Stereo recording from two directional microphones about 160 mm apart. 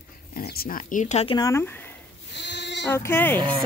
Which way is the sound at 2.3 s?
90° left.